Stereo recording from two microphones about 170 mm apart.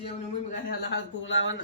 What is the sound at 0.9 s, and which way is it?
Speech, 90° left.